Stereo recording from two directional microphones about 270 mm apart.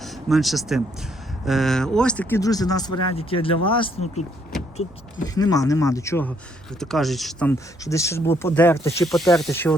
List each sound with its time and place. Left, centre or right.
0.0 s speech: centre
5.2 s speech: centre
8.8 s speech: centre
9.0 s speech: centre